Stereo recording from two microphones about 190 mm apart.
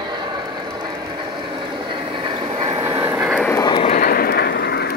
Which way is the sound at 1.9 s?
25° right (ahead or behind).